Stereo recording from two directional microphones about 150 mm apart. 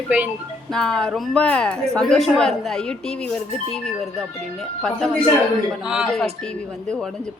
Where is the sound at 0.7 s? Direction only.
5° left (ahead or behind).